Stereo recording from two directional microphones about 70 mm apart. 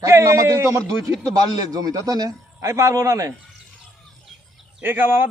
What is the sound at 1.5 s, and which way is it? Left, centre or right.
Speech, right.